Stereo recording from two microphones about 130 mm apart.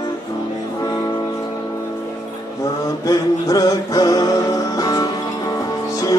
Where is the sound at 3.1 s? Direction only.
25° left (ahead or behind).